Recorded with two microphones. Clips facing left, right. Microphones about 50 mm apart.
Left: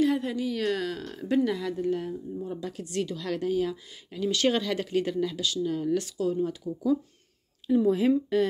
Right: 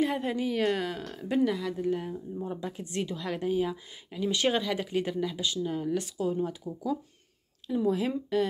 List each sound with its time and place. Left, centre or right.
0.0 s a woman's voice: right
1.0 s speech: centre
2.3 s speech: right
7.6 s speech: centre